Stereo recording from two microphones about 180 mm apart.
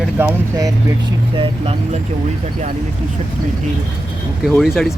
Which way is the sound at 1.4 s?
35° right (ahead or behind).